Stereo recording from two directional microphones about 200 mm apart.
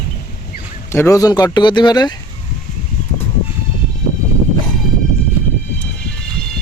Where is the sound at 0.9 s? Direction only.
15° left (ahead or behind).